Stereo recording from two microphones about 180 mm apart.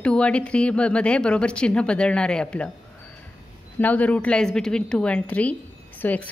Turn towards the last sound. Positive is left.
turn(degrees=10)  # may be behind; listen again after turning